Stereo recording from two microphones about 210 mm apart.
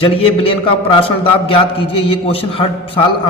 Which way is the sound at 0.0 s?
25° left (ahead or behind).